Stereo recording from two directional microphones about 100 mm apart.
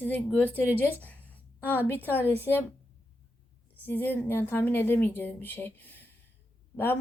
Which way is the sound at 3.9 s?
20° left (ahead or behind).